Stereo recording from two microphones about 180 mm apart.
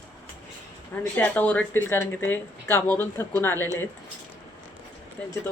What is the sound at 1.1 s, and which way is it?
Speech, 10° left (ahead or behind).